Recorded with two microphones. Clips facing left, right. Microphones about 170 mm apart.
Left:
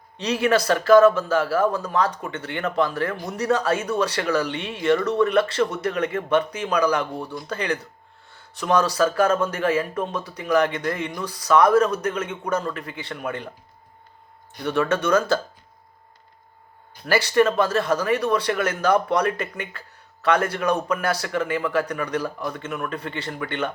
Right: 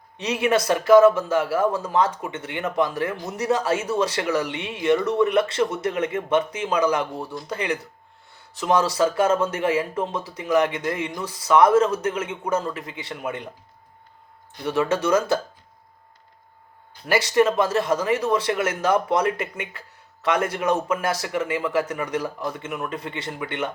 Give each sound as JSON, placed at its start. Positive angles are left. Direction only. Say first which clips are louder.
{"t": 0.2, "sound": "speech", "louder": "left 1 dB", "side_deg": -20}
{"t": 14.6, "sound": "speech", "louder": "even", "side_deg": -20}
{"t": 17.1, "sound": "speech", "louder": "even", "side_deg": -20}